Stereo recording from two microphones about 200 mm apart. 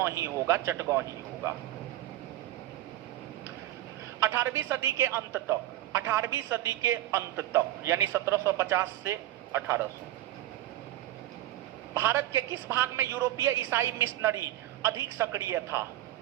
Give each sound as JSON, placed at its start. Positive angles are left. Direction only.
{"t": 0.0, "sound": "a woman's voice", "side_deg": -15}
{"t": 4.2, "sound": "a woman's voice", "side_deg": -15}
{"t": 11.9, "sound": "a woman's voice", "side_deg": -10}